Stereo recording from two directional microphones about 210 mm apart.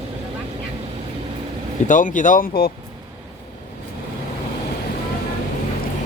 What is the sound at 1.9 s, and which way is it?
Speech, 40° left (ahead or behind).